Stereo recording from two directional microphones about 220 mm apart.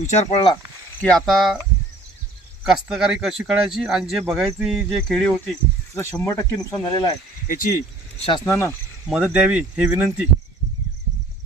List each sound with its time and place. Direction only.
0.1 s speech: 30° left (ahead or behind)
1.0 s speech: centre (ahead or behind)
2.6 s speech: 5° right (ahead or behind); by 7.1 s 15° left (ahead or behind)
7.4 s speech: 40° left (ahead or behind)
8.4 s speech: 10° left (ahead or behind)
9.0 s speech: 5° right (ahead or behind)